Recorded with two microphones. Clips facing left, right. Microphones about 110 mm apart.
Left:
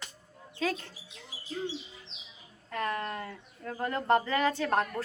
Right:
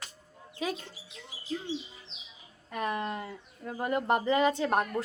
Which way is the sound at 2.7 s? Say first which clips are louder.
Right 1 dB; 15° right (ahead or behind).